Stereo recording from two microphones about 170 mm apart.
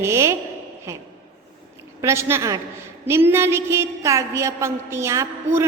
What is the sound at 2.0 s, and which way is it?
A woman's voice, 15° right (ahead or behind).